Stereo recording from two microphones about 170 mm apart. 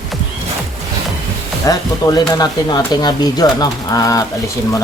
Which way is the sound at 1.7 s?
20° left (ahead or behind).